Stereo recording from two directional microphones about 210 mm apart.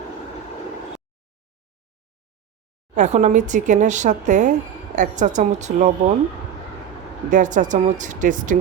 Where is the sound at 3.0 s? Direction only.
35° right (ahead or behind).